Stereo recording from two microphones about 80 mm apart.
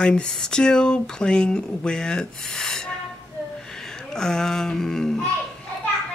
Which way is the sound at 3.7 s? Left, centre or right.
Centre.